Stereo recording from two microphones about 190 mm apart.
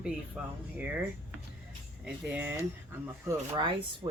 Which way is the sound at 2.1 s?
5° right (ahead or behind).